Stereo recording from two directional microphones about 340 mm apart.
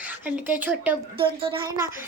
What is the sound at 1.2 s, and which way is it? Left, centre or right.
Speech, centre.